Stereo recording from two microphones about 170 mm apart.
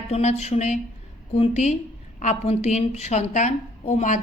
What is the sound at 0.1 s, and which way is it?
A woman's voice, 40° left (ahead or behind).